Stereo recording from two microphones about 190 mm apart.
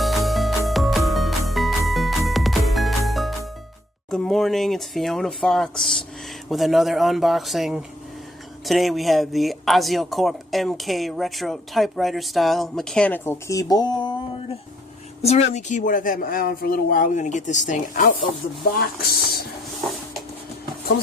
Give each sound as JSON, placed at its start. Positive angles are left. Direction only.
{"t": 0.0, "sound": "music", "side_deg": 0}
{"t": 4.1, "sound": "speech", "side_deg": 0}
{"t": 15.2, "sound": "speech", "side_deg": 35}
{"t": 18.8, "sound": "speech", "side_deg": 55}